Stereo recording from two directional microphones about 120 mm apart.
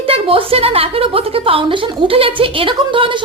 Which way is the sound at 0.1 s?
50° right (ahead or behind).